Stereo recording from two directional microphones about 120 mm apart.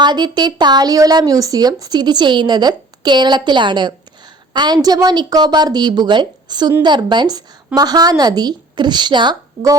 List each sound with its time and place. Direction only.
0.0 s speech: 40° right (ahead or behind)